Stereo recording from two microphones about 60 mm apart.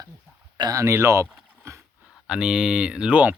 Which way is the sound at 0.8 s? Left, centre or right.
Right.